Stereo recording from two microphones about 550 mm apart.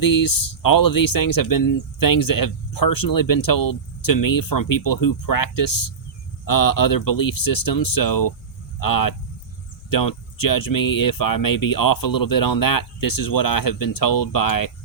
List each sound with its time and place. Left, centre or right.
0.0 s speech: left